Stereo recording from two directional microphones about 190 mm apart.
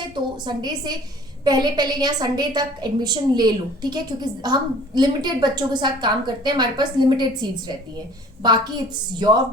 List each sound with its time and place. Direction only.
0.0 s a woman's voice: 20° right (ahead or behind)